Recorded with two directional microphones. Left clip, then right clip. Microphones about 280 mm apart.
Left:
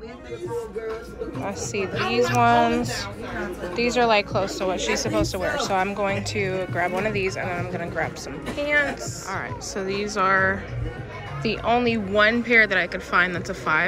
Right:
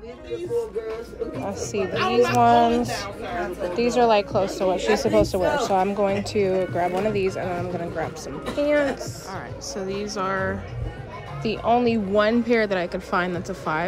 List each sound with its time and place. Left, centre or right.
1.4 s speech: centre